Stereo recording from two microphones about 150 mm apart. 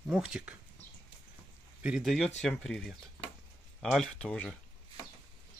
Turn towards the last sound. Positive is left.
turn(degrees=5)  # may be behind; listen again after turning